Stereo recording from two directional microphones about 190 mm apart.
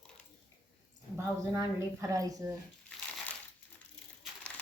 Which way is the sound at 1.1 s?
15° right (ahead or behind).